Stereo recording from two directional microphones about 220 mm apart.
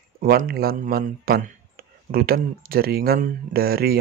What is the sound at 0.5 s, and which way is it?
Speech, 40° right (ahead or behind).